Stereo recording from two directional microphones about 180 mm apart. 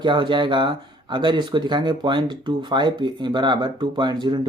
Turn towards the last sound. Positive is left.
turn(degrees=-25)  # may be behind; listen again after turning